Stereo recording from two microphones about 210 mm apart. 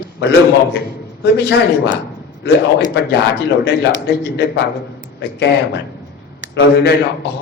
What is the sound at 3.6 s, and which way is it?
A man's voice, 55° left (ahead or behind).